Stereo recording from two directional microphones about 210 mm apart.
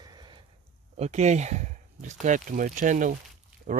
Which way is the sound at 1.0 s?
35° right (ahead or behind).